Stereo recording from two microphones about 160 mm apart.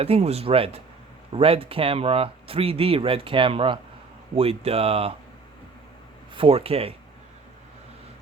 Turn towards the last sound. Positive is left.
turn(degrees=-35)  # may be behind; listen again after turning